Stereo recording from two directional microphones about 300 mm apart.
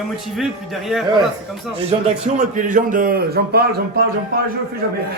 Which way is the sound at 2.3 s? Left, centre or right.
Right.